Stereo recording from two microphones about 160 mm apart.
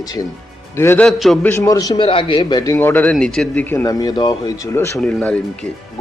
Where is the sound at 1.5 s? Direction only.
20° left (ahead or behind).